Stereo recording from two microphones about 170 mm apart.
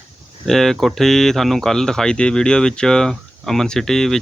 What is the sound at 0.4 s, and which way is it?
Speech, centre (ahead or behind).